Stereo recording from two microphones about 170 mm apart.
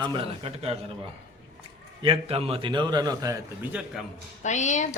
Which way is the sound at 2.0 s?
35° right (ahead or behind).